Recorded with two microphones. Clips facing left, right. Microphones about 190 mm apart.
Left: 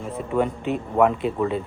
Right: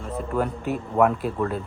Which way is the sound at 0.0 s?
Centre (ahead or behind).